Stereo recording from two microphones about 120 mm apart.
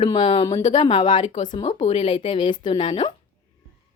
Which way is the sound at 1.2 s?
80° left.